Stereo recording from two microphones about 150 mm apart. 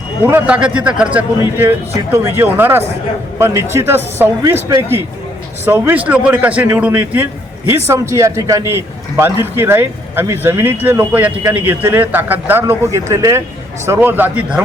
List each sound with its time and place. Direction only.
0.3 s a man's voice: 10° right (ahead or behind)
5.6 s a man's voice: 15° right (ahead or behind)